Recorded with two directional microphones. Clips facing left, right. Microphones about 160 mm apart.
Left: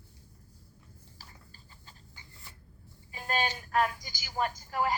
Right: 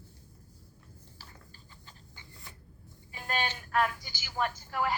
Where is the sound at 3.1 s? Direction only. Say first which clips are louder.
Left 2 dB; 40° left (ahead or behind).